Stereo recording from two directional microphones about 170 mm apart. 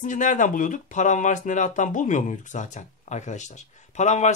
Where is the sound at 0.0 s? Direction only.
50° left (ahead or behind).